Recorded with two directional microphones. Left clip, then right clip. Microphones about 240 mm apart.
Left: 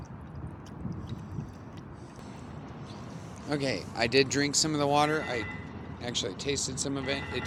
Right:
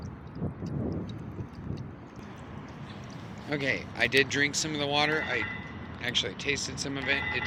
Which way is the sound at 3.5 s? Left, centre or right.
Left.